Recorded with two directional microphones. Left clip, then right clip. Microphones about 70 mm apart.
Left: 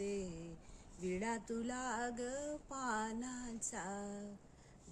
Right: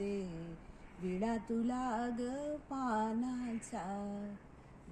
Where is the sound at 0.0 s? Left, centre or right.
Left.